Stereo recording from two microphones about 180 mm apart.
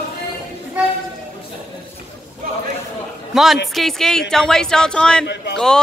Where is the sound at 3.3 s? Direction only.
Centre (ahead or behind).